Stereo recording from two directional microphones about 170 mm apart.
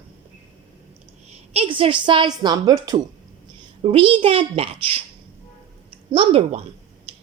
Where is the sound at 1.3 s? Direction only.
35° right (ahead or behind).